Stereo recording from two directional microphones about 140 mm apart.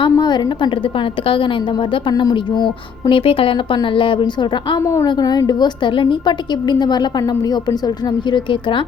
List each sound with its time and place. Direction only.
0.0 s a woman's voice: 30° left (ahead or behind)
4.8 s a woman's voice: 20° left (ahead or behind)